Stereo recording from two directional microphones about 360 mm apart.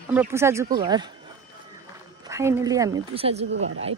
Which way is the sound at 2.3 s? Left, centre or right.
Centre.